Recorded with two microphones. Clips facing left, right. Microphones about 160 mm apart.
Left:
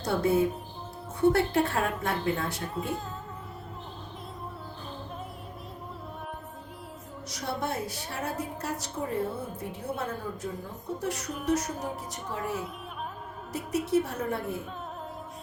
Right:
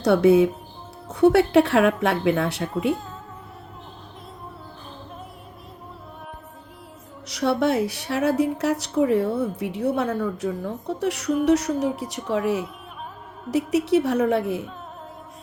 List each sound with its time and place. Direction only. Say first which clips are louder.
0.0 s a woman's voice: right 9 dB; 75° right (ahead or behind)
7.3 s a woman's voice: right 12 dB; 75° right (ahead or behind)